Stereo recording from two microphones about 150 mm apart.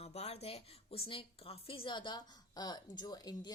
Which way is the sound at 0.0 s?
45° left (ahead or behind).